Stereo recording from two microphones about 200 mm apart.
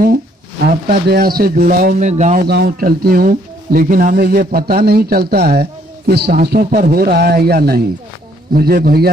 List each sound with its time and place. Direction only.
0.7 s speech: 50° right (ahead or behind)
2.4 s speech: 50° right (ahead or behind)